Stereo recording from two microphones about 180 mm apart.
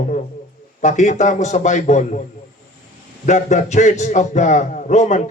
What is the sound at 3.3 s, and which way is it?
A man's voice, 40° left (ahead or behind).